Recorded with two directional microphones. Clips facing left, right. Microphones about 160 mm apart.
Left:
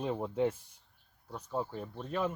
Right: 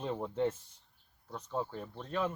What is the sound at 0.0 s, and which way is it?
Speech, 10° left (ahead or behind).